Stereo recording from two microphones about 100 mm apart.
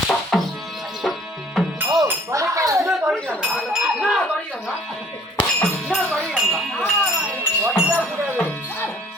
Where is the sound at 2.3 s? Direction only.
35° right (ahead or behind).